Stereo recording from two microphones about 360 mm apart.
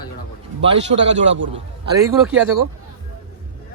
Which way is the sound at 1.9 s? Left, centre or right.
Centre.